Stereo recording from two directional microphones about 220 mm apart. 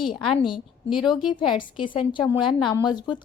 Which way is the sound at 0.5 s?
20° left (ahead or behind).